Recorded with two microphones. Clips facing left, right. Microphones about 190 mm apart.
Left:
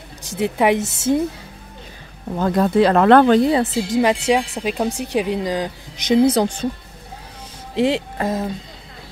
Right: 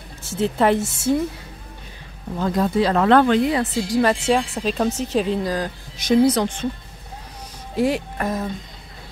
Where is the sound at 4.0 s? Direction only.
15° left (ahead or behind).